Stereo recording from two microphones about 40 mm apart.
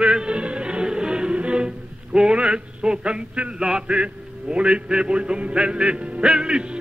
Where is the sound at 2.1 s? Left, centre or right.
Right.